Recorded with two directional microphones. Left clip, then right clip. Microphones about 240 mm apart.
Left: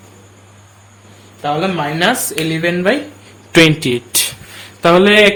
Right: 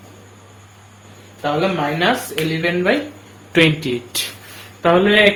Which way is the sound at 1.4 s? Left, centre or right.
Left.